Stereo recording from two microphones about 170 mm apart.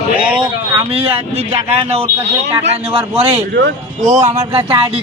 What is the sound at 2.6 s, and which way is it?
Speech, 35° right (ahead or behind).